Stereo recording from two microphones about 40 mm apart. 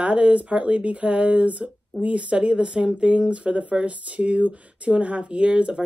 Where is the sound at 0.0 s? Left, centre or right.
Right.